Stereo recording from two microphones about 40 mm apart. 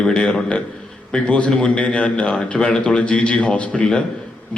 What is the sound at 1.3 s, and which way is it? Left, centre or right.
A man's voice, left.